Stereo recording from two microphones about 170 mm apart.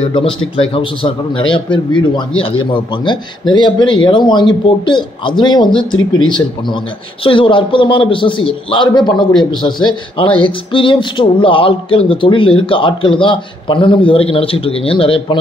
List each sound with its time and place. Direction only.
0.1 s a man's voice: 30° left (ahead or behind)